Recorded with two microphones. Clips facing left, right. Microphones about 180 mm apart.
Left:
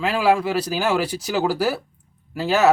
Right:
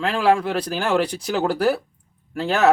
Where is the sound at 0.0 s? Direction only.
5° left (ahead or behind).